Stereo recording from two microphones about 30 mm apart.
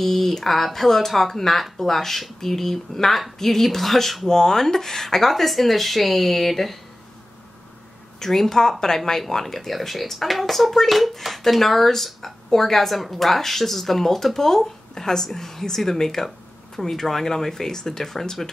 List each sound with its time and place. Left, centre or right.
0.0 s speech: centre
4.3 s speech: centre
8.2 s speech: centre